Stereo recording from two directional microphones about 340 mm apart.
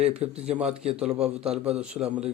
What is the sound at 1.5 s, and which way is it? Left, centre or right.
Speech, centre.